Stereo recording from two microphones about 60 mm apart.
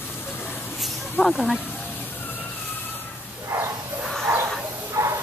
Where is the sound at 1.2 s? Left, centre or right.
Left.